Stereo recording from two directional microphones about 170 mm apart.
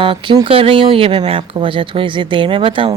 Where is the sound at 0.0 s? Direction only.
30° right (ahead or behind).